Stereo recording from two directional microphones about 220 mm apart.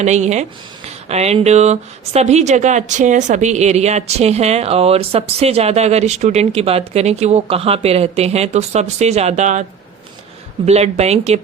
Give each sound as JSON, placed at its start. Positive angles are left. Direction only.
{"t": 0.0, "sound": "speech", "side_deg": -30}
{"t": 10.7, "sound": "speech", "side_deg": -30}